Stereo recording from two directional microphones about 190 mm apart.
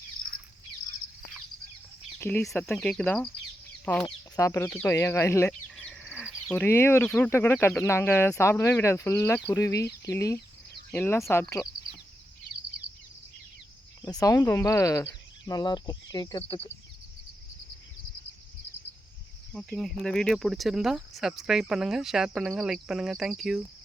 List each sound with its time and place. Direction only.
2.1 s a sound: 10° left (ahead or behind)
2.4 s speech: centre (ahead or behind)
5.7 s a sound: 5° left (ahead or behind)
6.5 s speech: 10° left (ahead or behind)
14.0 s speech: 20° left (ahead or behind)
19.5 s speech: centre (ahead or behind)